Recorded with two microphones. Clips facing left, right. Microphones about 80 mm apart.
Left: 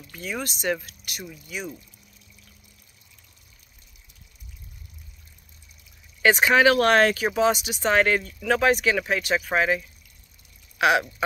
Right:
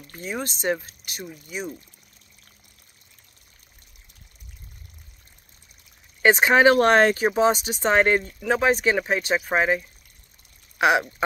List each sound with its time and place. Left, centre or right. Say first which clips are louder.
0.1 s speech: right 1 dB; right
6.2 s speech: right 2 dB; right